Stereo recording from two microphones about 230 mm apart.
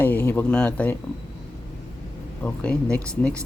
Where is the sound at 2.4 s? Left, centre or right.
Centre.